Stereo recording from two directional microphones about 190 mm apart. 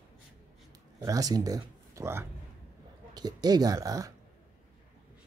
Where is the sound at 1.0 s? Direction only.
20° right (ahead or behind).